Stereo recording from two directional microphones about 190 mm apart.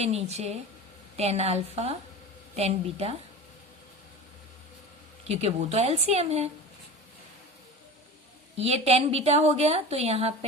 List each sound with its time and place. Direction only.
0.0 s a woman's voice: 35° right (ahead or behind)
5.3 s a woman's voice: 35° right (ahead or behind)
8.5 s a woman's voice: 30° right (ahead or behind)